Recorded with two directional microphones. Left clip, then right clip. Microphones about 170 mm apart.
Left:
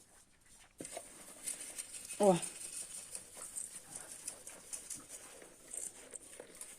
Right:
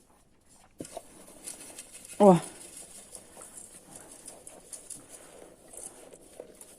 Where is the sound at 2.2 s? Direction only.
40° right (ahead or behind).